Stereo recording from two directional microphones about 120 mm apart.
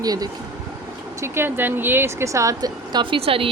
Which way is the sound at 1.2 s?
20° right (ahead or behind).